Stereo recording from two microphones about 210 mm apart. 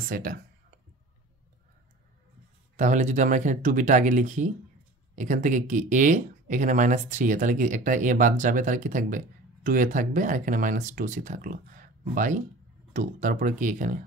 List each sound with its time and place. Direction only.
0.1 s speech: 40° right (ahead or behind)
2.7 s speech: 35° right (ahead or behind)